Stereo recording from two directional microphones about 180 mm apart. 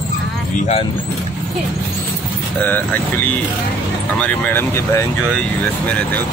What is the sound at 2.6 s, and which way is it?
Speech, 10° left (ahead or behind).